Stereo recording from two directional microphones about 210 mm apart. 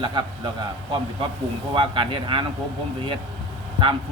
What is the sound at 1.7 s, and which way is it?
Speech, 25° right (ahead or behind).